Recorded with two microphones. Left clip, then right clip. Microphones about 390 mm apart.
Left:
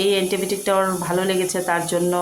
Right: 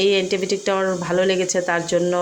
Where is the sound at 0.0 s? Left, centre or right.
Left.